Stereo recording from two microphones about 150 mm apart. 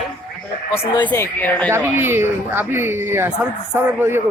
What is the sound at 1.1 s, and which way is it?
Speech, 15° left (ahead or behind).